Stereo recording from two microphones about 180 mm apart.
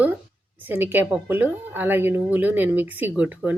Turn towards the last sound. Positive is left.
turn(degrees=-10)  # may be behind; listen again after turning